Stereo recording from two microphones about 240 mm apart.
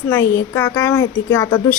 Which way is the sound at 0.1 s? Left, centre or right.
Centre.